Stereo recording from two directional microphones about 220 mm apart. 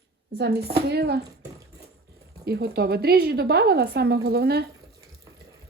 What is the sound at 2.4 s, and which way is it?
Speech, 45° right (ahead or behind).